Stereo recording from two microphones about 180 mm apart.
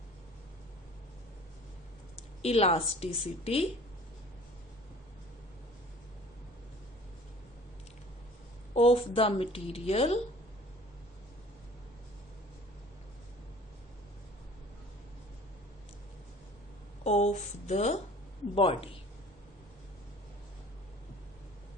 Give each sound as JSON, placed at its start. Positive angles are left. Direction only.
{"t": 2.4, "sound": "a woman's voice", "side_deg": 35}
{"t": 8.7, "sound": "a woman's voice", "side_deg": 30}
{"t": 17.0, "sound": "a woman's voice", "side_deg": 40}